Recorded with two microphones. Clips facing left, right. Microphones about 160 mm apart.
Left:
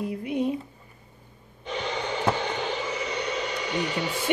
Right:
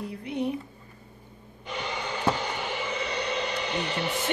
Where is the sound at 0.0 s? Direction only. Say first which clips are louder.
Left 3 dB; 20° left (ahead or behind).